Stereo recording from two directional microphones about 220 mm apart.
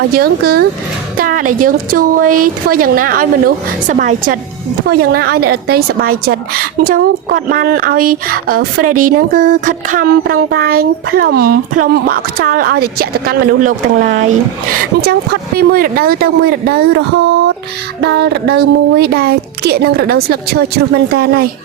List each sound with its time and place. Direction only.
0.1 s speech: 45° right (ahead or behind)
1.1 s a sound: 40° right (ahead or behind)
4.9 s speech: 45° right (ahead or behind)
8.1 s a sound: 40° right (ahead or behind)
13.0 s speech: 40° right (ahead or behind)
18.0 s speech: 50° right (ahead or behind)